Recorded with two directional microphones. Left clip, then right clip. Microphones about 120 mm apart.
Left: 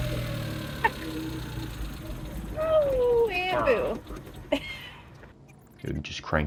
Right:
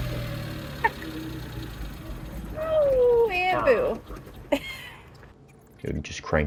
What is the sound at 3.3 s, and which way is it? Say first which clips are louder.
Cat: right 3 dB; 85° right.